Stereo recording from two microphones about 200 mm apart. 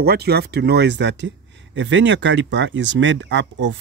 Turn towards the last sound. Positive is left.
turn(degrees=-65)  # may be behind; listen again after turning